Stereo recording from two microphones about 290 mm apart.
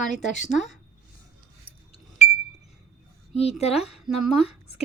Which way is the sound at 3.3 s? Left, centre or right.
Left.